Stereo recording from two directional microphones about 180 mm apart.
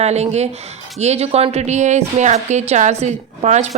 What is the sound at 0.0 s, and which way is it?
A woman's voice, 35° right (ahead or behind).